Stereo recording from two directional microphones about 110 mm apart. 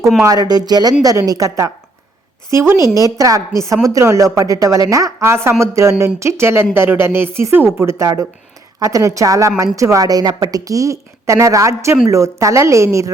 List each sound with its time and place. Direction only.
0.3 s a woman's voice: 35° right (ahead or behind)